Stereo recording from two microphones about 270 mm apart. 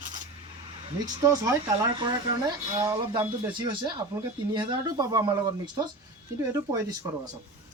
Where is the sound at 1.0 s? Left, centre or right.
Centre.